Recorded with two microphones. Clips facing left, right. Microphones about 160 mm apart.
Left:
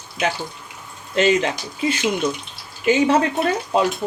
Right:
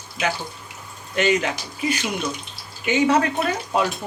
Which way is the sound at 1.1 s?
30° left (ahead or behind).